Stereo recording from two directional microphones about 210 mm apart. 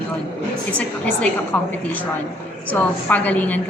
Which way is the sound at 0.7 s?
5° left (ahead or behind).